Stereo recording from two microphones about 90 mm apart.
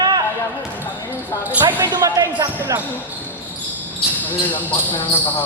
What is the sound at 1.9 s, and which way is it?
Basketball bounce, 40° right (ahead or behind).